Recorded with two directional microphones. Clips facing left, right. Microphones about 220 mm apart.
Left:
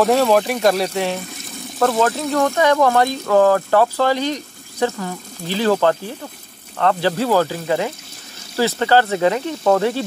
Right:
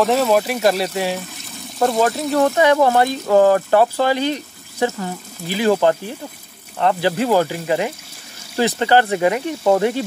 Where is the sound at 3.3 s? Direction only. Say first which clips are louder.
Right 1 dB; 20° right (ahead or behind).